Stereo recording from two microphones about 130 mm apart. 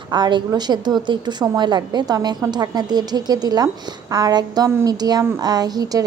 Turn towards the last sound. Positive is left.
turn(degrees=-30)  # may be behind; listen again after turning